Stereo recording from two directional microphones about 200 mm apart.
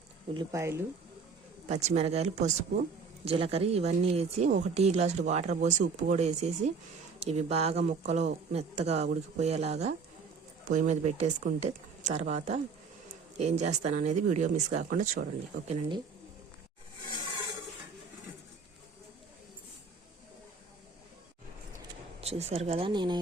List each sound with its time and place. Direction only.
0.3 s speech: 15° right (ahead or behind)
1.6 s speech: 35° right (ahead or behind)
22.2 s speech: 30° right (ahead or behind)